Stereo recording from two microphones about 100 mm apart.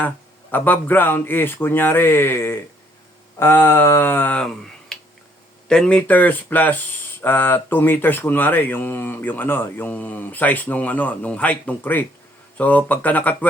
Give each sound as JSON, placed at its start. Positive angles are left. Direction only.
{"t": 0.5, "sound": "speech", "side_deg": 15}
{"t": 4.9, "sound": "finger snapping", "side_deg": 5}
{"t": 5.6, "sound": "speech", "side_deg": 10}